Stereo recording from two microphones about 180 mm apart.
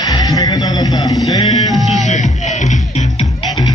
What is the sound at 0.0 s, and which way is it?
Music, 20° left (ahead or behind).